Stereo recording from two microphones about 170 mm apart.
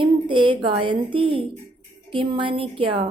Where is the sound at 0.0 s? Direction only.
30° right (ahead or behind).